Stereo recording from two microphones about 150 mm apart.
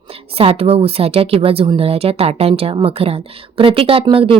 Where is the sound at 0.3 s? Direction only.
40° right (ahead or behind).